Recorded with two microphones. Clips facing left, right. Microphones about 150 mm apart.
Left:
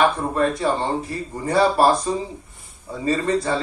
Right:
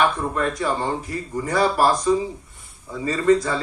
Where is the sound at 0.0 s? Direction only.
30° left (ahead or behind).